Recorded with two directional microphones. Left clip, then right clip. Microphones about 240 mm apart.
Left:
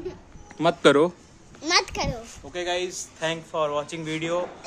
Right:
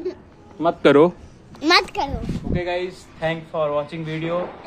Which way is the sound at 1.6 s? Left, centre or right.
Right.